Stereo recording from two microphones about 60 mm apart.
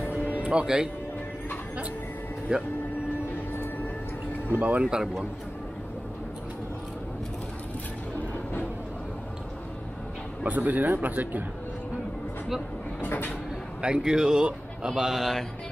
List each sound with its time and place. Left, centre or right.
0.0 s music: left
0.3 s music: right
2.5 s speech: centre
4.5 s speech: right
4.8 s speech: centre
10.4 s speech: right
13.0 s vehicle: left
13.7 s speech: centre